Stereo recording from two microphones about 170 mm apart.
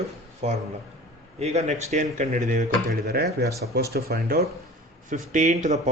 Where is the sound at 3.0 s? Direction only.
65° right (ahead or behind).